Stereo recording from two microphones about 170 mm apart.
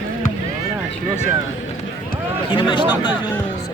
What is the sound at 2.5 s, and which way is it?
Speech, 30° left (ahead or behind).